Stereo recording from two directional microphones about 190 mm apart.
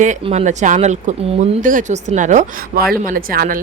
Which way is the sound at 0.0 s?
40° right (ahead or behind).